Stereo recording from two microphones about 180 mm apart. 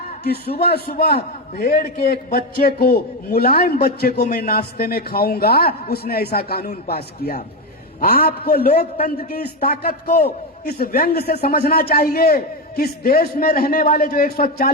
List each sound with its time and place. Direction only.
0.3 s a man's voice: 60° left (ahead or behind)